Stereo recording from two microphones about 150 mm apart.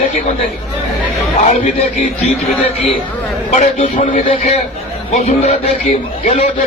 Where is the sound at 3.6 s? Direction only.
55° left (ahead or behind).